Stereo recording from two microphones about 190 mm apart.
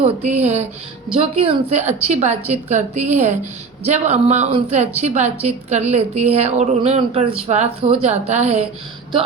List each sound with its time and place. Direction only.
0.0 s a woman's voice: 35° right (ahead or behind)